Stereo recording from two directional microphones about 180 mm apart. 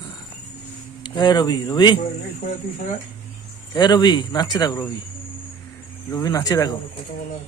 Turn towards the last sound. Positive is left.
turn(degrees=20)  # may be behind; listen again after turning